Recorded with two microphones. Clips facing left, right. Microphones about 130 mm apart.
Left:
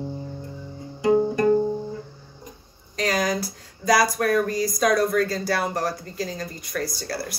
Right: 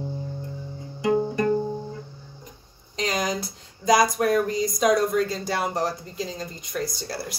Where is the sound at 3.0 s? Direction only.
20° right (ahead or behind).